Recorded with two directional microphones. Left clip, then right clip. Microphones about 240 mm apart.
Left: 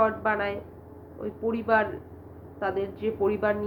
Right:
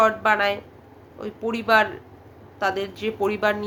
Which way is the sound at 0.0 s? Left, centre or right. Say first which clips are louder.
Right 6 dB; centre.